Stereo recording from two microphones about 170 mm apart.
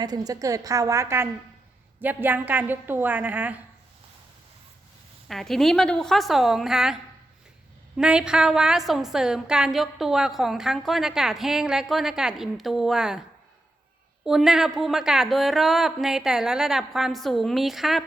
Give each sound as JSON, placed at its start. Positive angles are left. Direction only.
{"t": 0.0, "sound": "a woman's voice", "side_deg": -20}
{"t": 5.3, "sound": "a woman's voice", "side_deg": 0}
{"t": 14.3, "sound": "a woman's voice", "side_deg": -5}